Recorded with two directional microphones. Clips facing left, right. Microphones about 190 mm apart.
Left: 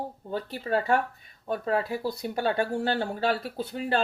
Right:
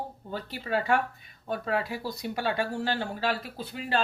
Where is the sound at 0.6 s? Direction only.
40° left (ahead or behind).